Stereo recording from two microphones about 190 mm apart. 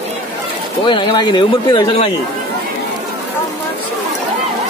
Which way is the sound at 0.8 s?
25° left (ahead or behind).